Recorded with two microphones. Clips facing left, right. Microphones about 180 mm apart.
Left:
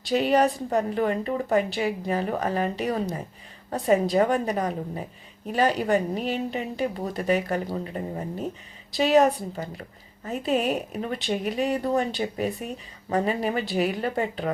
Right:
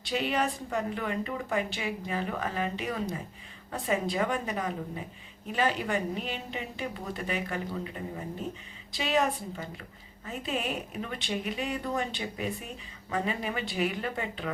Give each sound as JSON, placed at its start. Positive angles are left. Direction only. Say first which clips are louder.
{"t": 0.0, "sound": "a woman's voice", "louder": "left 8 dB", "side_deg": 40}